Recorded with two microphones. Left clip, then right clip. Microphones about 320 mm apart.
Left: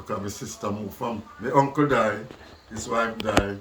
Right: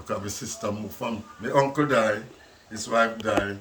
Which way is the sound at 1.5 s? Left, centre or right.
Centre.